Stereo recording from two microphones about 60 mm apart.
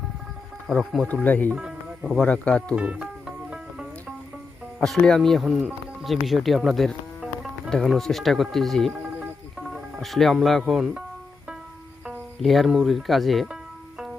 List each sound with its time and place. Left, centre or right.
0.7 s speech: centre
1.0 s speech: left
1.5 s music: centre
2.1 s speech: centre
2.7 s music: centre
5.0 s speech: centre
5.4 s speech: centre
6.7 s music: centre
7.7 s speech: centre
8.9 s music: right
9.6 s music: centre
10.6 s speech: centre
12.4 s speech: centre